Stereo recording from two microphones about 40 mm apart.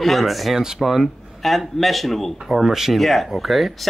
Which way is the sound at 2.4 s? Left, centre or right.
Centre.